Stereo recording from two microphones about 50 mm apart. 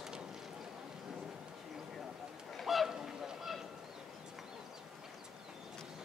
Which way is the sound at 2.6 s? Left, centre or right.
Centre.